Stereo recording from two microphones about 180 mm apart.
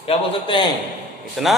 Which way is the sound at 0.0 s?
30° left (ahead or behind).